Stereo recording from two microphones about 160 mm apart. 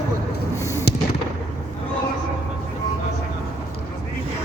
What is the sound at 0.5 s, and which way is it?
Fireworks, 15° left (ahead or behind).